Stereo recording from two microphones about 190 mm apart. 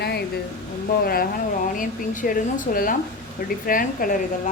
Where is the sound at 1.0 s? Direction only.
50° left (ahead or behind).